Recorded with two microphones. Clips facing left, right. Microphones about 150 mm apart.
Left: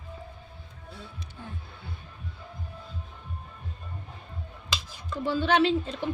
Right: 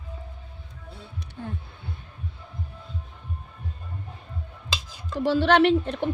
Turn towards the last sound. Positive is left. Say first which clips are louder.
# right 4 dB
turn(degrees=-65)  # may be behind; listen again after turning